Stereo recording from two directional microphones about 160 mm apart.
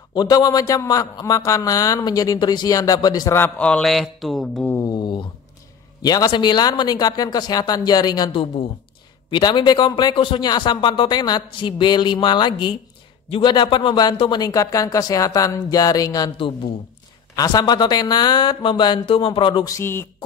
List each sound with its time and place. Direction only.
0.1 s a man's voice: 25° left (ahead or behind); by 4.6 s centre (ahead or behind)
4.6 s mantra: 20° left (ahead or behind)
6.0 s a man's voice: 25° left (ahead or behind)